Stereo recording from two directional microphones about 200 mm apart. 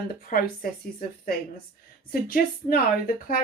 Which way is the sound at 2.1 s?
45° left (ahead or behind).